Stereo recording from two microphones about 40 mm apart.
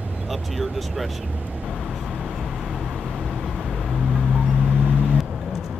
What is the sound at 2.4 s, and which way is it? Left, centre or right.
Vehicle, centre.